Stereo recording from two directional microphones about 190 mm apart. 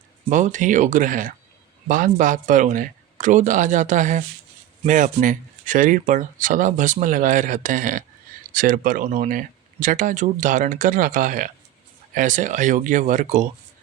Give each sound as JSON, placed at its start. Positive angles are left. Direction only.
{"t": 0.3, "sound": "speech", "side_deg": -40}